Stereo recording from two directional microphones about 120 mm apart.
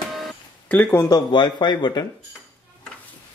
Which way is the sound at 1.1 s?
40° left (ahead or behind).